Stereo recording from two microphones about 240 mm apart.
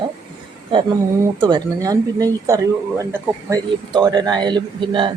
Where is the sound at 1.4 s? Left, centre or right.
Centre.